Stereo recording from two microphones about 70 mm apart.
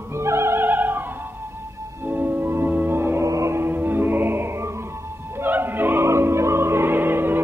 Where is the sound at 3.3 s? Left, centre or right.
Right.